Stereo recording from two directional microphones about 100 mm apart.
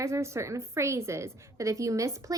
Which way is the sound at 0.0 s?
30° right (ahead or behind).